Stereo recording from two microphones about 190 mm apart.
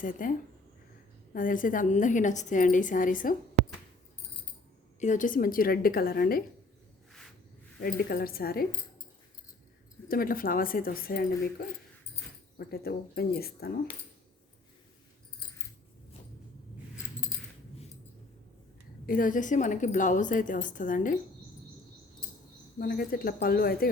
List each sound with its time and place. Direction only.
0.0 s a woman's voice: 45° left (ahead or behind)
4.9 s a woman's voice: 40° left (ahead or behind)
7.8 s a woman's voice: 50° left (ahead or behind)
10.1 s a woman's voice: 50° left (ahead or behind)
12.5 s speech: 55° left (ahead or behind)
19.0 s a woman's voice: 45° left (ahead or behind)
22.8 s a woman's voice: 50° left (ahead or behind)